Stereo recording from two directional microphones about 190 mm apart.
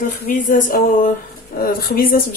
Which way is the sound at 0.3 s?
45° left (ahead or behind).